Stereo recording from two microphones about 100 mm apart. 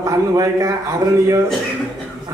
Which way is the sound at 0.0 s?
35° right (ahead or behind).